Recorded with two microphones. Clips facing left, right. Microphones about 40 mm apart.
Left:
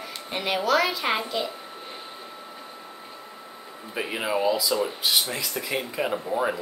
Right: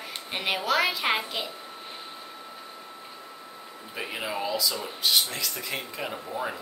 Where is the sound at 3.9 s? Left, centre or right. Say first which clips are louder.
Left 5 dB; centre.